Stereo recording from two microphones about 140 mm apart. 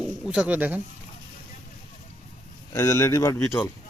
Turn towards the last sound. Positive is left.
turn(degrees=25)  # may be behind; listen again after turning